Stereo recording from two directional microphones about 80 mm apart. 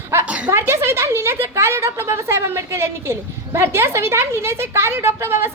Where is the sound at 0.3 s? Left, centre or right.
Centre.